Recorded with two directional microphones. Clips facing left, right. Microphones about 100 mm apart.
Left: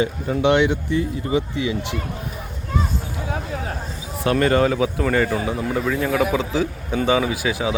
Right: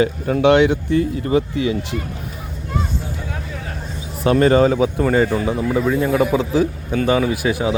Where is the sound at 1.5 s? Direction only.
45° right (ahead or behind).